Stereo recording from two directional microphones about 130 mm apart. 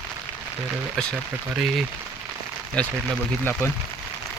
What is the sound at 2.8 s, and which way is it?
Speech, 5° left (ahead or behind).